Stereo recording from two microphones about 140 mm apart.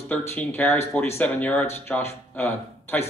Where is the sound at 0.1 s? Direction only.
15° left (ahead or behind).